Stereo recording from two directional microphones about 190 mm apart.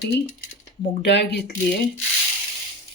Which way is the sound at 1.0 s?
60° left (ahead or behind).